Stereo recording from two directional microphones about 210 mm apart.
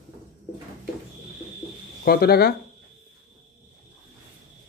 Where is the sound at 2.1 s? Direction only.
45° left (ahead or behind).